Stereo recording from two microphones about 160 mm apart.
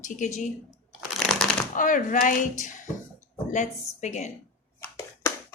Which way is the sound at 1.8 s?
55° left (ahead or behind).